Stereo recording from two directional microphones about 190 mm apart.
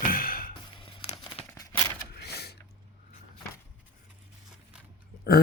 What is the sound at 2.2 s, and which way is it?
Vehicle, 60° left (ahead or behind).